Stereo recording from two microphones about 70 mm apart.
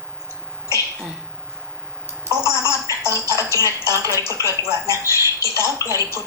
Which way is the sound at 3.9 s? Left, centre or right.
Right.